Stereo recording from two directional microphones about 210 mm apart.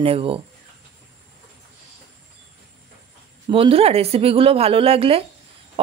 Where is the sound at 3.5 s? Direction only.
25° right (ahead or behind).